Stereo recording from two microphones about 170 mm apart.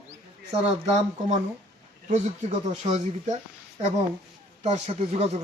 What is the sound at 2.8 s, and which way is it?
Speech, 35° right (ahead or behind).